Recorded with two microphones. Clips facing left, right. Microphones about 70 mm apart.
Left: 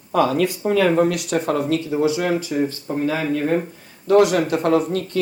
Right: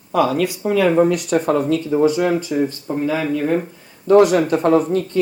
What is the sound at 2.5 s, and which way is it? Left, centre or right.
Speech, centre.